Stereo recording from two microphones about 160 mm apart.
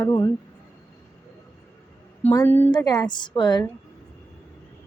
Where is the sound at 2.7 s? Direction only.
25° left (ahead or behind).